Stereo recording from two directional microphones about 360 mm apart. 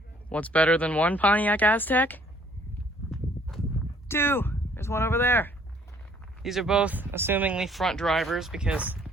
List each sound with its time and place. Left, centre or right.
0.3 s speech: centre
4.1 s speech: centre